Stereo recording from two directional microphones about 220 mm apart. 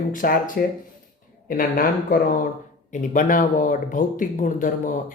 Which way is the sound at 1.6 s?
40° left (ahead or behind).